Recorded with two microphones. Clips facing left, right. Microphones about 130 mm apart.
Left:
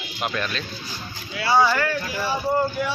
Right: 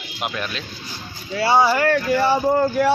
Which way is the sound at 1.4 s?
30° right (ahead or behind).